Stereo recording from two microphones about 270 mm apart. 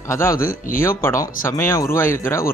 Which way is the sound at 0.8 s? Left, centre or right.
Centre.